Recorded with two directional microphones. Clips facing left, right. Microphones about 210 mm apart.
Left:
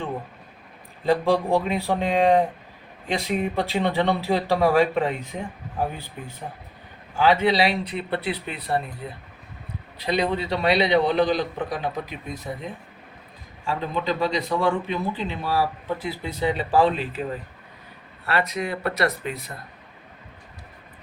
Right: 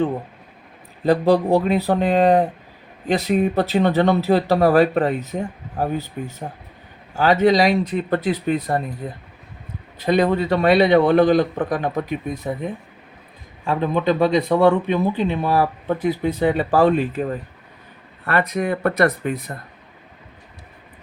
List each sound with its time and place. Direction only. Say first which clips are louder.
1.0 s a man's voice: right 5 dB; 40° right (ahead or behind)
18.3 s a man's voice: right 5 dB; 50° right (ahead or behind)